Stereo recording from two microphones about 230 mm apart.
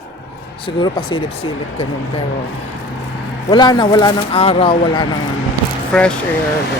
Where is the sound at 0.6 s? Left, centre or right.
Left.